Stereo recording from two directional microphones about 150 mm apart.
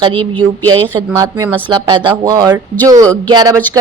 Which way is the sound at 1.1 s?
25° right (ahead or behind).